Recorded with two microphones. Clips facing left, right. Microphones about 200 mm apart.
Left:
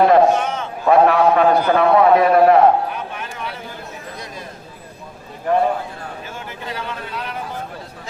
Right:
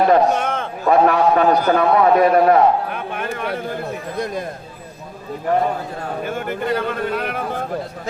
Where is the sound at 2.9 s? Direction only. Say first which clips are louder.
Right 4 dB; 55° right (ahead or behind).